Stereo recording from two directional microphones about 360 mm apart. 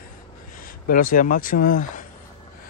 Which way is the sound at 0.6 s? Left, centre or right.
Left.